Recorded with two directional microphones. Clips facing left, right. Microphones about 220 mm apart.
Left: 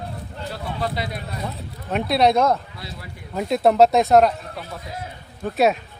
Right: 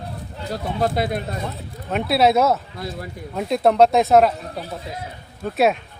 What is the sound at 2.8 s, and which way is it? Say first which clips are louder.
Speech: right 7 dB; 50° right (ahead or behind).